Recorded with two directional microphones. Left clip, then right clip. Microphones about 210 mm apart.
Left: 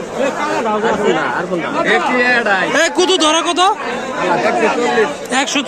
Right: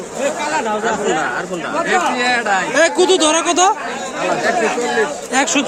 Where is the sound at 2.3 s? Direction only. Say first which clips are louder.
Left 3 dB; 30° right (ahead or behind).